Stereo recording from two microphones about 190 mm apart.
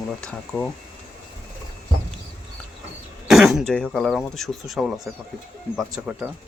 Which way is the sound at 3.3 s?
Centre (ahead or behind).